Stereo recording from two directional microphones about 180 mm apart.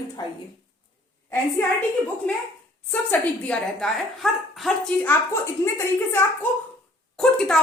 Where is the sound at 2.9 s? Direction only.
10° left (ahead or behind).